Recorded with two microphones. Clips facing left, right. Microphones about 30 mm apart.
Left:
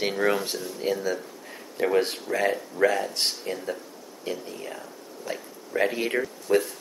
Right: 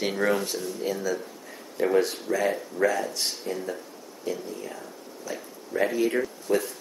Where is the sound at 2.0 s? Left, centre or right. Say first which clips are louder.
Even; left.